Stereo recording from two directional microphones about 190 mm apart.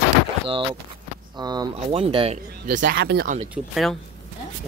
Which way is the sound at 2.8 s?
60° right (ahead or behind).